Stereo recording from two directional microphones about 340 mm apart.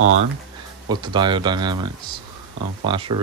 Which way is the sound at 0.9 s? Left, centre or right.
Centre.